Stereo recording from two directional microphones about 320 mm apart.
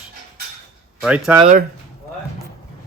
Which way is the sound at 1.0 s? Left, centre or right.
Centre.